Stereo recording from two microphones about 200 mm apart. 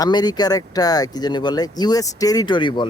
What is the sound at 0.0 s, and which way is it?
Speech, 20° left (ahead or behind).